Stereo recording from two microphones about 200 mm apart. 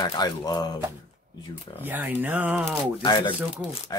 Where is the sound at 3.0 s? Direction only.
25° left (ahead or behind).